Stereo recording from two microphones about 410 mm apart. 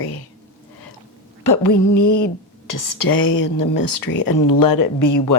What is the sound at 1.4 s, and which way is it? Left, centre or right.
Speech, left.